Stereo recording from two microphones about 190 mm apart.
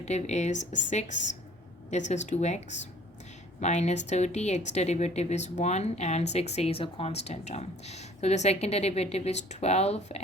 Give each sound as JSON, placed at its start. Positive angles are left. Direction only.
{"t": 0.0, "sound": "speech", "side_deg": 35}